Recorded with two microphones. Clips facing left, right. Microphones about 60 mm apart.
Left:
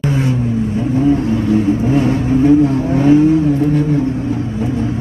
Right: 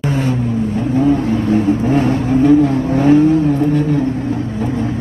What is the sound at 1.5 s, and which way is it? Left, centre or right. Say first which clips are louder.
Vehicle: even; right.